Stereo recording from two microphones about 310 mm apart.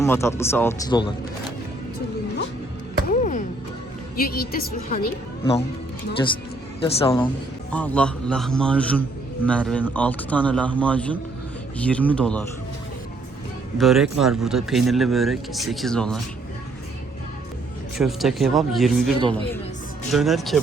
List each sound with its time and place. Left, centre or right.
0.0 s speech: centre
3.1 s music: left
4.2 s a woman's voice: left
6.8 s speech: centre
7.7 s a man's voice: centre
13.7 s a man's voice: centre
17.9 s a man's voice: centre
20.1 s a man's voice: centre